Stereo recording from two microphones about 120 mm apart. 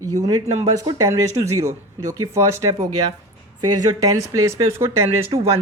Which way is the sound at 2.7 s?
35° right (ahead or behind).